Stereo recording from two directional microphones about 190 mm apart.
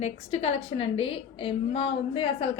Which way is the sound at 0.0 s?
35° left (ahead or behind).